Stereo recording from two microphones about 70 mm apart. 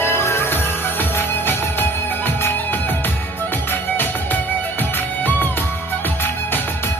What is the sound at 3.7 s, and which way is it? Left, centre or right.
Music, left.